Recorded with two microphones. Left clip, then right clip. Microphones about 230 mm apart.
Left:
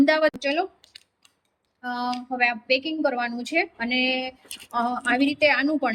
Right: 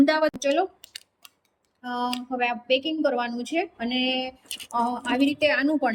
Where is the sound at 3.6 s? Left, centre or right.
Centre.